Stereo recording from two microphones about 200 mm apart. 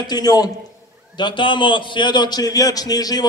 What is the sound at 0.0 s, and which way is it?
A man's voice, 20° left (ahead or behind).